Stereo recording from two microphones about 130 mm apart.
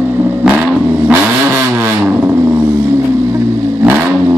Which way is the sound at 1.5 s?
20° right (ahead or behind).